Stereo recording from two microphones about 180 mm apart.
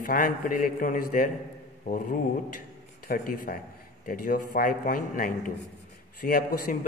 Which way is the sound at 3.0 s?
55° left (ahead or behind).